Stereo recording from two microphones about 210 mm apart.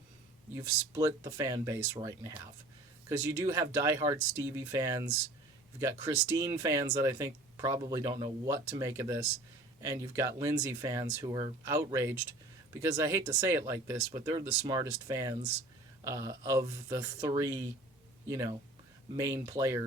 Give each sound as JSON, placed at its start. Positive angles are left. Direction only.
{"t": 0.5, "sound": "speech", "side_deg": -15}